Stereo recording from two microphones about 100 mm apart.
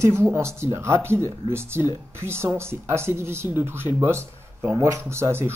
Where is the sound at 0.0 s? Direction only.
25° right (ahead or behind).